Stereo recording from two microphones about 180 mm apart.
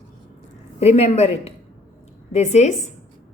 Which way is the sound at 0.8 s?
35° left (ahead or behind).